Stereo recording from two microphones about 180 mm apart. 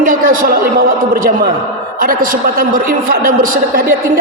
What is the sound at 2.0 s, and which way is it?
A man's voice, 50° right (ahead or behind).